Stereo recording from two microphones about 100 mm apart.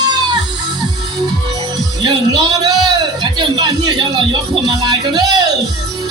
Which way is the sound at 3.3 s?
50° right (ahead or behind).